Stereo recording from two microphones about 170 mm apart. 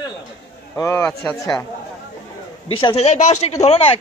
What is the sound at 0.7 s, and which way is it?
Speech, 15° left (ahead or behind).